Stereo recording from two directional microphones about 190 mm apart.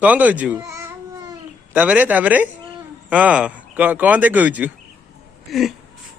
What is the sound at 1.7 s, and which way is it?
Speech, 10° right (ahead or behind).